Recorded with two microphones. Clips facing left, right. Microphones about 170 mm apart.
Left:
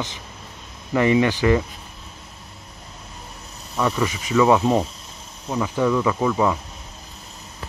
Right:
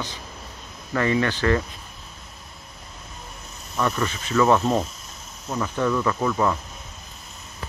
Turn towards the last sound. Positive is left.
turn(degrees=10)  # may be behind; listen again after turning